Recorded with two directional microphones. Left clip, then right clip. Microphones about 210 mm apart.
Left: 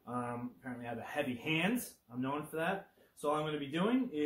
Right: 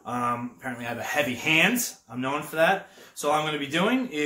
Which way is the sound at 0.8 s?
15° right (ahead or behind).